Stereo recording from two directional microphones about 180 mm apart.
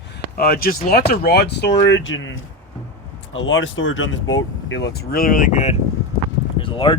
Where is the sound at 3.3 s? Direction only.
90° left.